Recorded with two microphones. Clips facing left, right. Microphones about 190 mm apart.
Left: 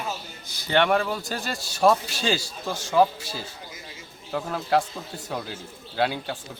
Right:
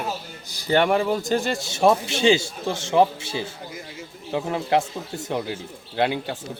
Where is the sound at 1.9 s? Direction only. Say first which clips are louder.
Right 4 dB; 25° right (ahead or behind).